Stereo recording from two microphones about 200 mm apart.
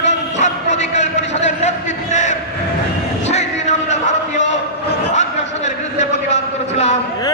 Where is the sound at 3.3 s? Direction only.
35° left (ahead or behind).